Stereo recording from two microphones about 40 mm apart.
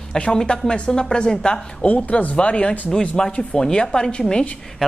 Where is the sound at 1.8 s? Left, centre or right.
Left.